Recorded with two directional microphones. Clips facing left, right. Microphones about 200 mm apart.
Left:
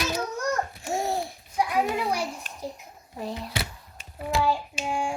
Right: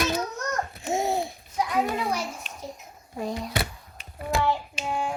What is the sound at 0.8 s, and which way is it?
Babbling, 20° right (ahead or behind).